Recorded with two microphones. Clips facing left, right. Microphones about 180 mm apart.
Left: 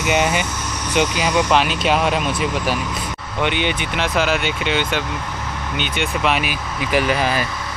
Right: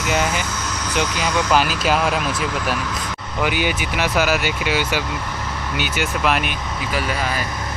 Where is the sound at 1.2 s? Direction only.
15° left (ahead or behind).